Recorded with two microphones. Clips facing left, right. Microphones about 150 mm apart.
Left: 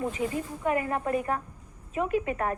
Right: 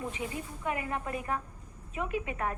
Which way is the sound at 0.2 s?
45° left (ahead or behind).